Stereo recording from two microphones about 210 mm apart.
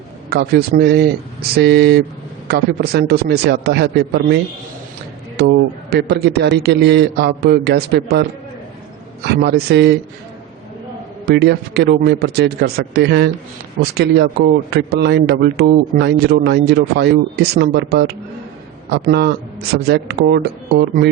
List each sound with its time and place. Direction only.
0.3 s speech: 50° right (ahead or behind)
5.4 s speech: 50° right (ahead or behind)
9.2 s speech: 50° right (ahead or behind)
11.3 s speech: 50° right (ahead or behind)